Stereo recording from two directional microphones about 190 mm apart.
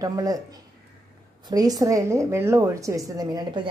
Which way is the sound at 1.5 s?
20° right (ahead or behind).